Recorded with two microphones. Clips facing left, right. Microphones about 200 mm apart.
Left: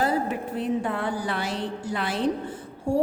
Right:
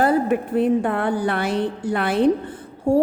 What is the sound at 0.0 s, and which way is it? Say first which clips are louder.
A woman's voice: right 7 dB; 55° right (ahead or behind).